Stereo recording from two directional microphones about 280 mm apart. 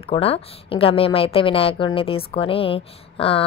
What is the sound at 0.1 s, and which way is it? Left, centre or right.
A woman's voice, centre.